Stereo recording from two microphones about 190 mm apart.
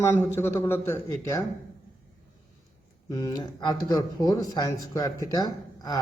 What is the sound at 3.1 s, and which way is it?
Speech, 20° left (ahead or behind).